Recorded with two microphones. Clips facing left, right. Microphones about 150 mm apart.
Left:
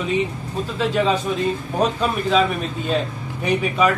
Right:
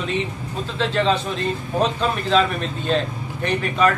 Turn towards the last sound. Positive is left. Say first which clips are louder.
# left 1 dB
turn(degrees=5)  # may be behind; listen again after turning